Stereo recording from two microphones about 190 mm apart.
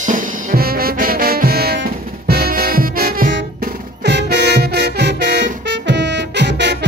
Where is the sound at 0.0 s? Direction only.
45° right (ahead or behind).